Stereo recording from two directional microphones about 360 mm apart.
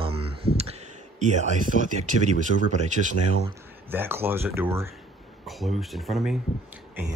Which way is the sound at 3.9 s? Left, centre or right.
Centre.